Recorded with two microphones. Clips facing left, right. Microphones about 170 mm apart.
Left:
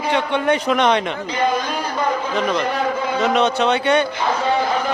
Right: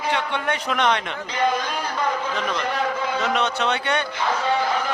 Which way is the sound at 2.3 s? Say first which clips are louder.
Left 5 dB; 20° left (ahead or behind).